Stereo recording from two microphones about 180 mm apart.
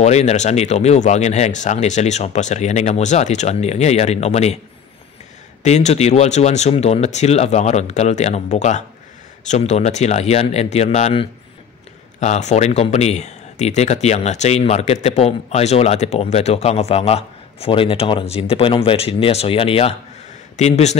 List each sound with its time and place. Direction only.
0.0 s speech: 40° left (ahead or behind)
5.6 s speech: 40° left (ahead or behind)